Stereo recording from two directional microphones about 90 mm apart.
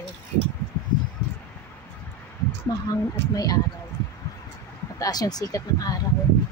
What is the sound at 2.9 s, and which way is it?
Speech, 40° left (ahead or behind).